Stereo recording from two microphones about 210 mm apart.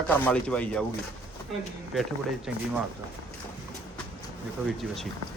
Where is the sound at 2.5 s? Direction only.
5° right (ahead or behind).